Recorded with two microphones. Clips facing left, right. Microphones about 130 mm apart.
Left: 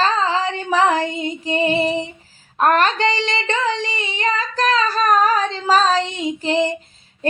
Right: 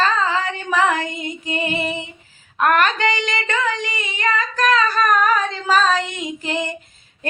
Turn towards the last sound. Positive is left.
turn(degrees=30)  # may be behind; listen again after turning